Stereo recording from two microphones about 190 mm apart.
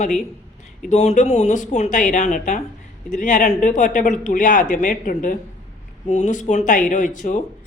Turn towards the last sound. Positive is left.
turn(degrees=40)  # may be behind; listen again after turning